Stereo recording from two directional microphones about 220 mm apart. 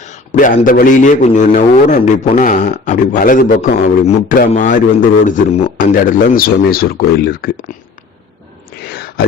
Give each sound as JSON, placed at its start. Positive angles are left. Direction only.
{"t": 0.3, "sound": "a man's voice", "side_deg": 35}